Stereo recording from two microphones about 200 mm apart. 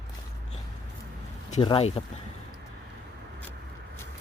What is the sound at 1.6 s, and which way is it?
Speech, 25° left (ahead or behind).